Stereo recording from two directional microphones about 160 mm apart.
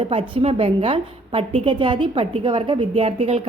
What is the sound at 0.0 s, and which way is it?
A woman's voice, 35° right (ahead or behind).